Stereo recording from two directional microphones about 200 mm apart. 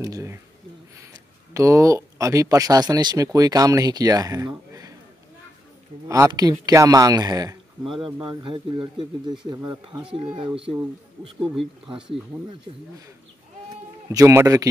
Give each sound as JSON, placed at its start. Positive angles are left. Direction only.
{"t": 0.0, "sound": "speech", "side_deg": -15}
{"t": 1.5, "sound": "speech", "side_deg": -15}
{"t": 6.0, "sound": "speech", "side_deg": -15}
{"t": 14.1, "sound": "speech", "side_deg": -15}